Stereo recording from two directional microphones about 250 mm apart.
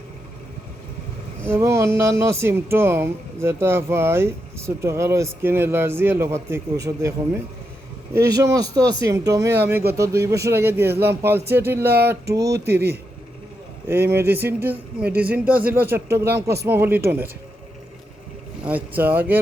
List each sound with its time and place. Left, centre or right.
1.5 s speech: centre
8.1 s speech: centre
12.5 s speech: right
13.8 s speech: centre
16.0 s speech: right
16.6 s speech: centre
18.6 s speech: centre